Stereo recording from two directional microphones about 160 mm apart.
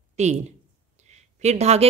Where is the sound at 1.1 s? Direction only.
45° right (ahead or behind).